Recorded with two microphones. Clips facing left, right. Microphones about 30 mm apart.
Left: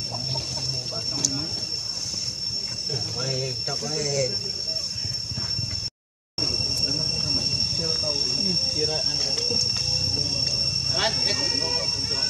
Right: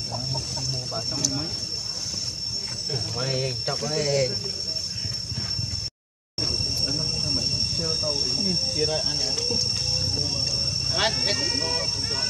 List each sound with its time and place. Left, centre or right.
2.9 s speech: right
6.5 s a sound: centre
7.0 s train: centre
8.7 s speech: centre
9.1 s speech: centre
9.8 s cricket: centre
11.0 s speech: centre